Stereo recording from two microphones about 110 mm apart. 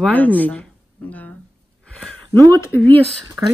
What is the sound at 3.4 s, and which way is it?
Speech, 25° right (ahead or behind).